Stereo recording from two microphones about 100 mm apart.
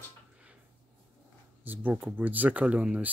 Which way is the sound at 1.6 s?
20° right (ahead or behind).